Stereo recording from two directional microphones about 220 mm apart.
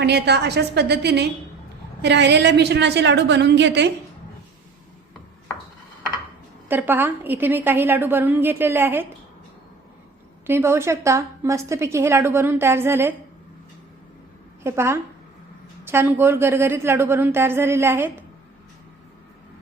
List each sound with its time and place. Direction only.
0.0 s a woman's voice: 50° right (ahead or behind)
6.7 s a woman's voice: 10° right (ahead or behind)
10.4 s a woman's voice: 10° right (ahead or behind)
14.6 s a woman's voice: 10° right (ahead or behind)